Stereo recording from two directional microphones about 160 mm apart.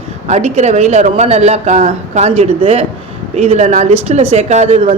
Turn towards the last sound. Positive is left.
turn(degrees=-40)  # may be behind; listen again after turning